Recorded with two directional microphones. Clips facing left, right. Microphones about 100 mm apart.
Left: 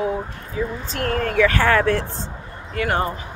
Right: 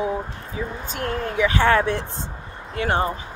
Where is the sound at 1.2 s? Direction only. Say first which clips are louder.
Left 1 dB; 20° right (ahead or behind).